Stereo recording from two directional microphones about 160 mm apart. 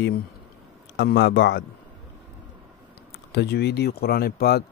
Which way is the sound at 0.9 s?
90° left.